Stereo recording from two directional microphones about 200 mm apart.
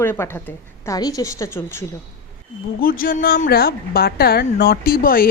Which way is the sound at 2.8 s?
45° left (ahead or behind).